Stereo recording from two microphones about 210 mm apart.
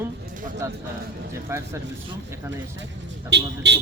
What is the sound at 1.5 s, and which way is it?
Speech, 10° right (ahead or behind).